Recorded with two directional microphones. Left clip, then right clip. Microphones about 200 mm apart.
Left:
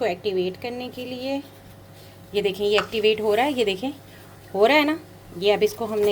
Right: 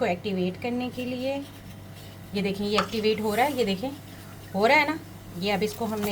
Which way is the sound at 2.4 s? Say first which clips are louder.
Left 5 dB; 40° left (ahead or behind).